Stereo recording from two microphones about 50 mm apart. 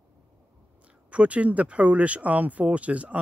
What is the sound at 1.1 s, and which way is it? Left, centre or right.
Speech, right.